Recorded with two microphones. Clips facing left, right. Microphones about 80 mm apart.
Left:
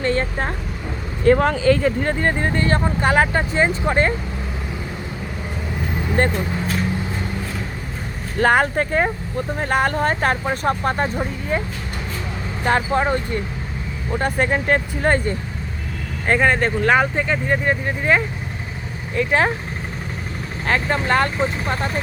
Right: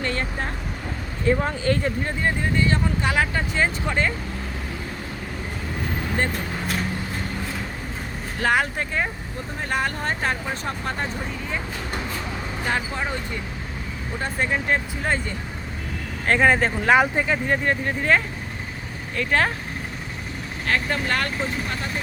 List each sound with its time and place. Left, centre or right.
0.0 s vehicle: left
1.2 s speech: left
2.2 s speech: left
6.2 s speech: left
8.4 s speech: left
12.6 s speech: left
14.2 s speech: left
16.2 s speech: centre
20.7 s speech: left
21.7 s speech: left